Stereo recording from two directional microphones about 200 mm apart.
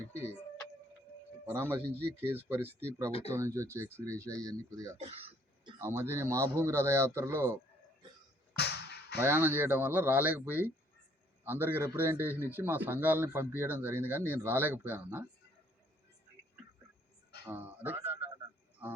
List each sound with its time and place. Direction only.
1.5 s speech: 10° right (ahead or behind)
4.9 s throat clearing: 30° right (ahead or behind)
5.8 s speech: 15° right (ahead or behind)
8.5 s music: 55° left (ahead or behind)
9.2 s speech: 10° right (ahead or behind)
17.5 s speech: 10° right (ahead or behind)